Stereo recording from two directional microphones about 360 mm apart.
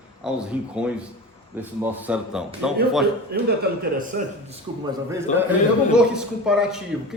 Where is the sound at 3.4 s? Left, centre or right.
Right.